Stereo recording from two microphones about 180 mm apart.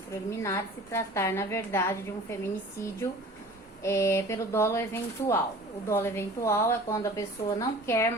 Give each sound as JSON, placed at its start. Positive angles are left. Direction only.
{"t": 0.1, "sound": "a woman's voice", "side_deg": 15}